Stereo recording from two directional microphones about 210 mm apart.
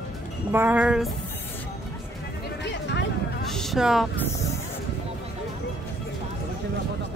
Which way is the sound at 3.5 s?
Centre (ahead or behind).